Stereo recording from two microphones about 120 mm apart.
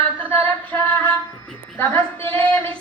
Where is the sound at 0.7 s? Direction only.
15° left (ahead or behind).